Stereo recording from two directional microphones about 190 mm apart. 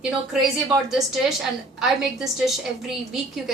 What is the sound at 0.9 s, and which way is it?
A woman's voice, centre (ahead or behind).